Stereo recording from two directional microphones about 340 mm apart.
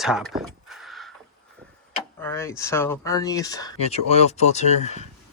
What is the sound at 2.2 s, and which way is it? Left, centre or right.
Speech, centre.